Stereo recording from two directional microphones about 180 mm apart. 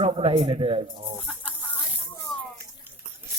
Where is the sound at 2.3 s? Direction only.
Centre (ahead or behind).